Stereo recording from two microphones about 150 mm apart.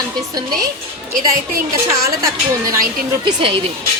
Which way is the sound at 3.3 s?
35° right (ahead or behind).